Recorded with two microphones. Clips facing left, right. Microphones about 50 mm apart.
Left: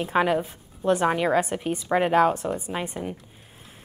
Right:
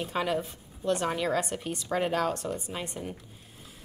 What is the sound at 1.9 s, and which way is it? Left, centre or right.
Speech, left.